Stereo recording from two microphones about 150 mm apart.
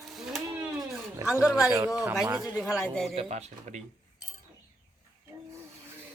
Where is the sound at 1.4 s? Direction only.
5° right (ahead or behind).